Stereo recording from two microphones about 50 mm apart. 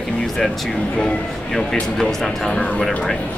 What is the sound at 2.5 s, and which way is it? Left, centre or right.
Speech, left.